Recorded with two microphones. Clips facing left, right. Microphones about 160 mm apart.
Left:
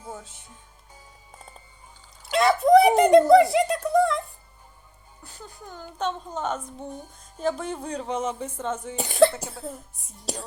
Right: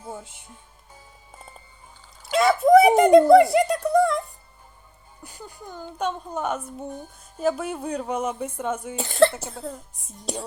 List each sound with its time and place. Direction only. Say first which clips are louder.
0.1 s music: right 2 dB; 10° right (ahead or behind)
2.3 s speech: right 1 dB; centre (ahead or behind)
5.2 s speech: right 3 dB; 10° right (ahead or behind)
9.0 s speech: even; 15° left (ahead or behind)
9.6 s speech: right 2 dB; 20° right (ahead or behind)
10.3 s speech: right 3 dB; centre (ahead or behind)